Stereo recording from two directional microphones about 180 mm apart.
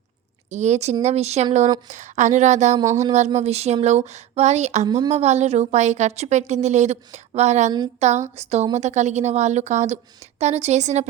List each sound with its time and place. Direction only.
0.5 s a woman's voice: 40° right (ahead or behind)
2.7 s speech: 15° right (ahead or behind)
3.0 s a woman's voice: 40° right (ahead or behind)